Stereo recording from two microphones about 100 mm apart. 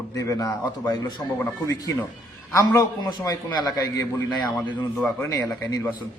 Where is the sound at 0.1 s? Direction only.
35° left (ahead or behind).